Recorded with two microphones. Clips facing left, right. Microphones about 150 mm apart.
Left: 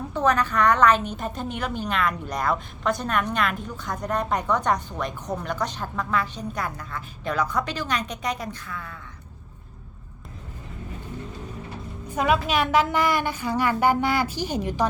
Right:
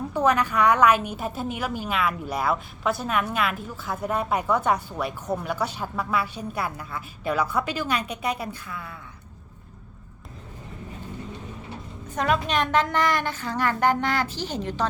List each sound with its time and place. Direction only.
0.1 s a woman's voice: 10° right (ahead or behind)
12.0 s a woman's voice: 10° left (ahead or behind)